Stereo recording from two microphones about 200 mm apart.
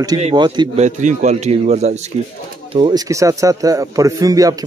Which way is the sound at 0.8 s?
35° right (ahead or behind).